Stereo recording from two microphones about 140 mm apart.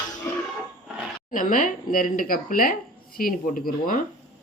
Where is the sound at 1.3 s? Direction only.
80° left.